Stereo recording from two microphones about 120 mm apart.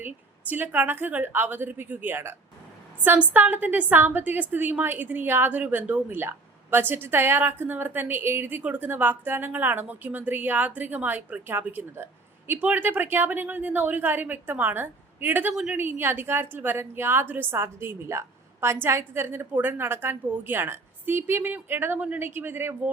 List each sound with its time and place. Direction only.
0.0 s a woman's voice: 15° right (ahead or behind)